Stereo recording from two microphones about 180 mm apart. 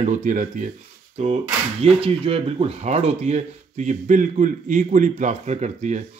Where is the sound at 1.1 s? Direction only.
35° right (ahead or behind).